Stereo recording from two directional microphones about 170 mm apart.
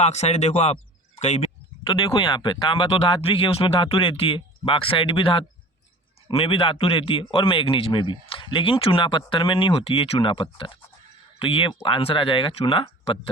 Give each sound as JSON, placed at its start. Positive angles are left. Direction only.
{"t": 0.0, "sound": "a man's voice", "side_deg": 40}